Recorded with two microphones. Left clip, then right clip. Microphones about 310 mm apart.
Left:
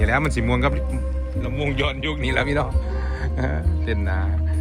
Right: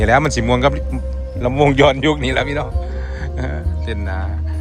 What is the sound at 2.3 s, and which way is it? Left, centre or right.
Speech, centre.